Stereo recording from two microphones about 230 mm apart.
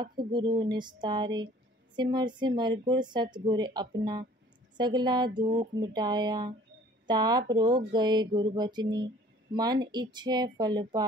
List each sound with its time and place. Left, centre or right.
0.2 s speech: right